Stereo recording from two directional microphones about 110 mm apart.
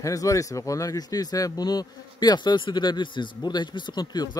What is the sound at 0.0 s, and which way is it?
Speech, 30° left (ahead or behind).